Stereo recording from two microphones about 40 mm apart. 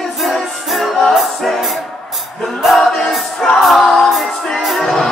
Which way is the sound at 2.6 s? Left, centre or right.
Centre.